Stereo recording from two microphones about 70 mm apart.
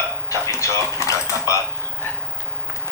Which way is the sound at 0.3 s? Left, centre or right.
Left.